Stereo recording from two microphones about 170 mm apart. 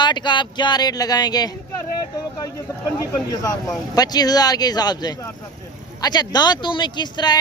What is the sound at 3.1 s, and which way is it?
Speech, 20° left (ahead or behind).